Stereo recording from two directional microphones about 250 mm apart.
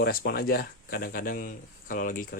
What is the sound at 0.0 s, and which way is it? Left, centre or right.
Speech, left.